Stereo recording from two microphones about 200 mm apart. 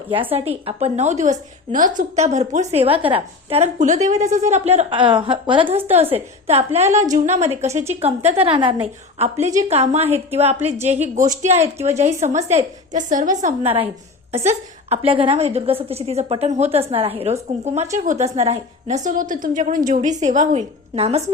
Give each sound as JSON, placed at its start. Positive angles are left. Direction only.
{"t": 0.6, "sound": "a woman's voice", "side_deg": -35}